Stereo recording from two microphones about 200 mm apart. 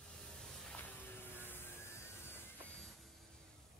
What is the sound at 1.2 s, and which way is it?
Vehicle, 10° left (ahead or behind).